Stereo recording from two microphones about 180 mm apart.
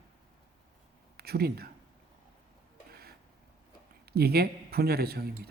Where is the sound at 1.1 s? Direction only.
60° right (ahead or behind).